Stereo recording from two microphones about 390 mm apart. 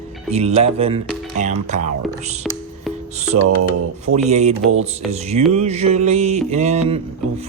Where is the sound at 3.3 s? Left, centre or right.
Right.